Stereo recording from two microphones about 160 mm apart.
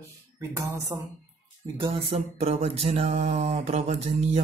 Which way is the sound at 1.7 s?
35° right (ahead or behind).